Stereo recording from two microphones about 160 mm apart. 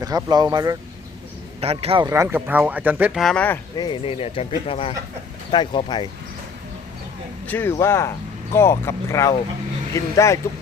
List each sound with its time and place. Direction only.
0.0 s speech: 25° right (ahead or behind)
1.6 s speech: 40° right (ahead or behind)
2.0 s speech: 15° right (ahead or behind)
3.2 s speech: 10° left (ahead or behind)
3.8 s speech: 30° left (ahead or behind)
7.4 s speech: 10° left (ahead or behind)